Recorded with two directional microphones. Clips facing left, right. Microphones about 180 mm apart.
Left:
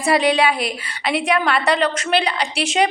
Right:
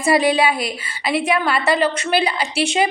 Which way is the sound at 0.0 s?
5° right (ahead or behind).